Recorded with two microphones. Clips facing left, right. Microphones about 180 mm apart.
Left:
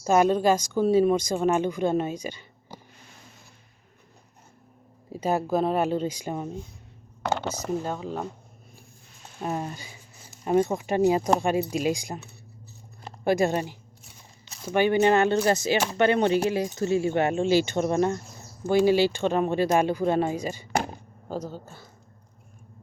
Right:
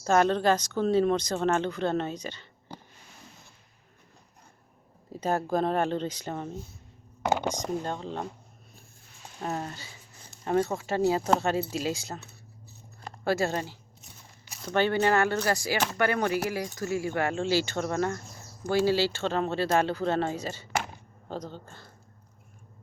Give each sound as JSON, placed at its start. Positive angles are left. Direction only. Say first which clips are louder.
{"t": 0.0, "sound": "speech", "louder": "left 3 dB", "side_deg": 10}
{"t": 5.1, "sound": "speech", "louder": "left 3 dB", "side_deg": 10}
{"t": 7.2, "sound": "a sound", "louder": "right 1 dB", "side_deg": -10}
{"t": 7.5, "sound": "speech", "louder": "left 2 dB", "side_deg": 5}
{"t": 9.4, "sound": "speech", "louder": "left 3 dB", "side_deg": 10}
{"t": 13.2, "sound": "speech", "louder": "left 4 dB", "side_deg": 15}